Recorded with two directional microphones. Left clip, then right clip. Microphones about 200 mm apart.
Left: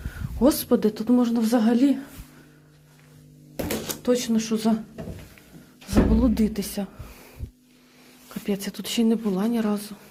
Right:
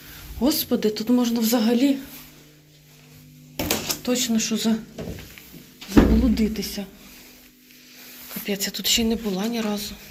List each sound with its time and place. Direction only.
0.3 s speech: 30° left (ahead or behind)
4.0 s speech: 25° left (ahead or behind)
5.9 s speech: 35° left (ahead or behind)
8.4 s speech: 25° left (ahead or behind)